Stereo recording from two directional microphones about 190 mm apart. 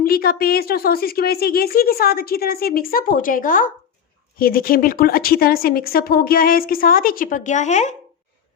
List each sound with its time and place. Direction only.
0.0 s a woman's voice: 50° left (ahead or behind)